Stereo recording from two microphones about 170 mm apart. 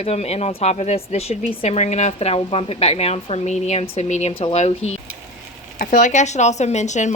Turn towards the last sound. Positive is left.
turn(degrees=45)  # may be behind; listen again after turning